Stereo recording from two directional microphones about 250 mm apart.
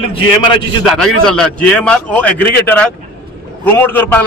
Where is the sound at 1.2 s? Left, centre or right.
Centre.